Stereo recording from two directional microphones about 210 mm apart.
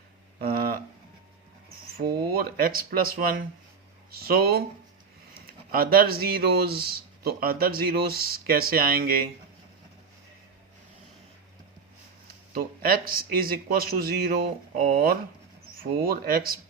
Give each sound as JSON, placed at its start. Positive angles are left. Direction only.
{"t": 0.3, "sound": "a sound", "side_deg": -45}
{"t": 2.0, "sound": "speech", "side_deg": -45}
{"t": 12.5, "sound": "speech", "side_deg": -45}